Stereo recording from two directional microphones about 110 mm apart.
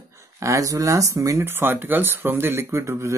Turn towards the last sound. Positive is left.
turn(degrees=-25)  # may be behind; listen again after turning